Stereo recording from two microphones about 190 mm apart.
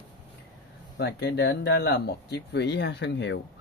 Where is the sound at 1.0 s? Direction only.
65° left (ahead or behind).